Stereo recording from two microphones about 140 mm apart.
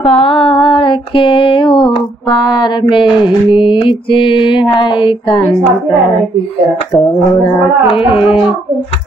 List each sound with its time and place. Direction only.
0.0 s a sound: 40° left (ahead or behind)
3.5 s mantra: 40° left (ahead or behind)
7.4 s mantra: 40° left (ahead or behind)